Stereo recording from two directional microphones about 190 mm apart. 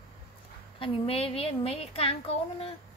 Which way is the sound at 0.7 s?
30° left (ahead or behind).